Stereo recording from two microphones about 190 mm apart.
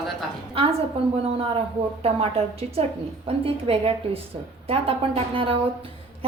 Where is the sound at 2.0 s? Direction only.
30° right (ahead or behind).